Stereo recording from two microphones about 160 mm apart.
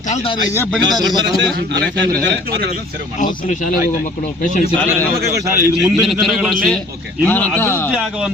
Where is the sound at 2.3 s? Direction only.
90° right.